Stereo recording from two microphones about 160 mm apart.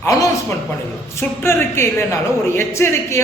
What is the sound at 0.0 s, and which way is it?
A man's voice, 20° left (ahead or behind).